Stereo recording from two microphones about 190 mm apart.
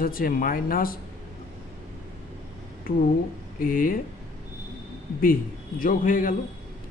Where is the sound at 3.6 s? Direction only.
50° left (ahead or behind).